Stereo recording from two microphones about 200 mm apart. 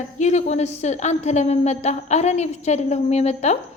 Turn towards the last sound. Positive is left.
turn(degrees=35)  # may be behind; listen again after turning